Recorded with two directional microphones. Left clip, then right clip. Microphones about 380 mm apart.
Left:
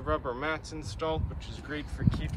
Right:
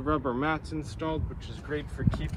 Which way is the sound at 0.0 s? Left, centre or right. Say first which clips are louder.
Right 3 dB; centre.